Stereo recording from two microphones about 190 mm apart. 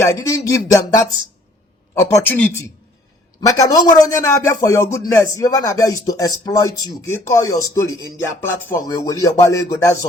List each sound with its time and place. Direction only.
0.0 s a man's voice: 15° left (ahead or behind)